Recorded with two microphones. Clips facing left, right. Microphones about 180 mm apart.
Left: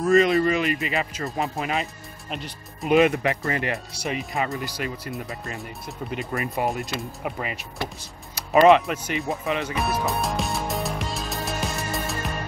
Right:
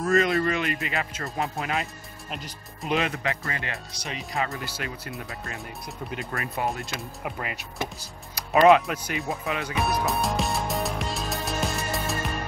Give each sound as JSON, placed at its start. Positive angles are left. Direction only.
{"t": 0.0, "sound": "speech", "side_deg": 0}
{"t": 3.4, "sound": "speech", "side_deg": 30}
{"t": 4.2, "sound": "speech", "side_deg": 0}
{"t": 8.5, "sound": "music", "side_deg": 0}